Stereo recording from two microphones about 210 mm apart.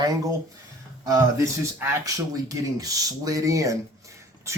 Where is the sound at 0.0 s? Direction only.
15° right (ahead or behind).